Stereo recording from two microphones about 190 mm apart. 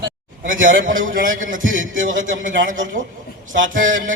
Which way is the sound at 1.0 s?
45° right (ahead or behind).